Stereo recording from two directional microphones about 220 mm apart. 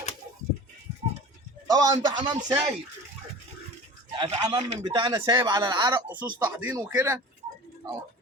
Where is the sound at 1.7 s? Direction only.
15° right (ahead or behind).